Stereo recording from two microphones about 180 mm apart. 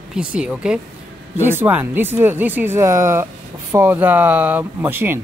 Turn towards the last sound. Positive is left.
turn(degrees=-10)  # may be behind; listen again after turning